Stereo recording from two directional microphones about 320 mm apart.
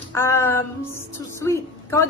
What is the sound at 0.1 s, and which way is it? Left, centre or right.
Music, centre.